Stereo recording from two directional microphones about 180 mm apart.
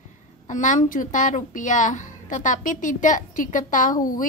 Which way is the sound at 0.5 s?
45° left (ahead or behind).